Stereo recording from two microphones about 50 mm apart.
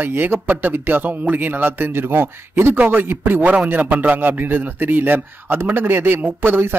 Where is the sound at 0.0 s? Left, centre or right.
Right.